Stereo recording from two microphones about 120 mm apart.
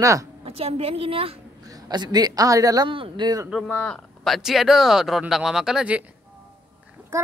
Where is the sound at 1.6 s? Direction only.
30° right (ahead or behind).